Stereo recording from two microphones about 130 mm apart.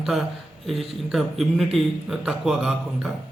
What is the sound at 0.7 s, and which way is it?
A man's voice, centre (ahead or behind).